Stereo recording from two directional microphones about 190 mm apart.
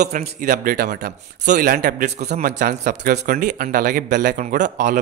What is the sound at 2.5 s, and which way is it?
Speech, 60° right (ahead or behind).